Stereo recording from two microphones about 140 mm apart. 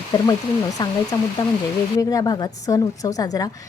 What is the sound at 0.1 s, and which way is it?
A woman's voice, 25° left (ahead or behind).